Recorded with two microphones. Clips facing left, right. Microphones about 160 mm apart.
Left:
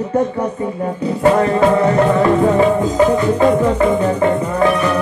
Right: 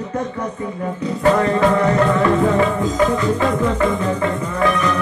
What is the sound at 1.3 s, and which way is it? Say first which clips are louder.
Music: left 3 dB; 30° left (ahead or behind).